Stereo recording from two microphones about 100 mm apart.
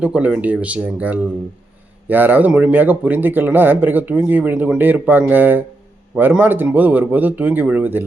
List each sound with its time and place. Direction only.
0.0 s a man's voice: 10° right (ahead or behind)